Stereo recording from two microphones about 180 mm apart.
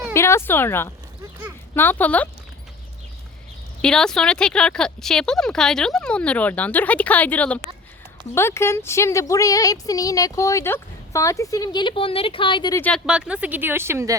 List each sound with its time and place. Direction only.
0.1 s speech: 15° left (ahead or behind)
3.8 s speech: 5° left (ahead or behind); by 12.7 s 25° left (ahead or behind)
12.7 s speech: 10° left (ahead or behind)
13.1 s speech: 5° right (ahead or behind)